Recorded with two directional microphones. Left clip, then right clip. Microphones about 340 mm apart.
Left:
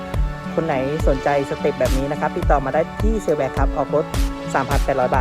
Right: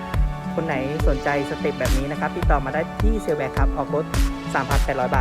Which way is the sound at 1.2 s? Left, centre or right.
Centre.